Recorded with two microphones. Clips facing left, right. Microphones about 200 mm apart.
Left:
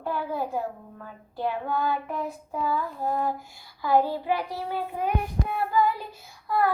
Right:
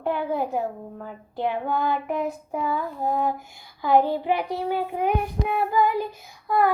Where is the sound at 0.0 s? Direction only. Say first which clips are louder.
Right 4 dB; 20° right (ahead or behind).